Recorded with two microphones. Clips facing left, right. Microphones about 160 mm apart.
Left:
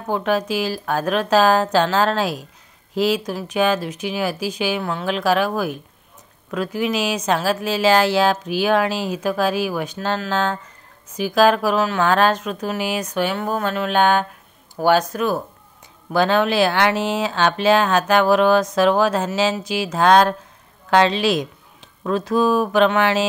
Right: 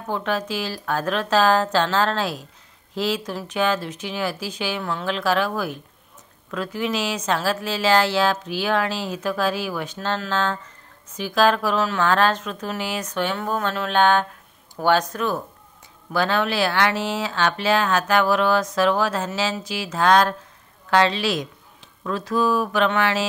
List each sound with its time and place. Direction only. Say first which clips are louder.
0.0 s speech: left 4 dB; 15° left (ahead or behind)
6.5 s speech: left 3 dB; 10° left (ahead or behind)